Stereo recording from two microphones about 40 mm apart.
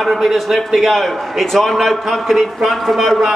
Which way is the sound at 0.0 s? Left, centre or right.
Centre.